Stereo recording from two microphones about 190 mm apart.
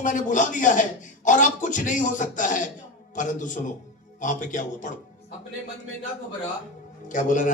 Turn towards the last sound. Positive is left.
turn(degrees=40)  # may be behind; listen again after turning